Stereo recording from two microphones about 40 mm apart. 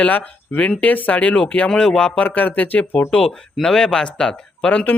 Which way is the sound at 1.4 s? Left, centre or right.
Left.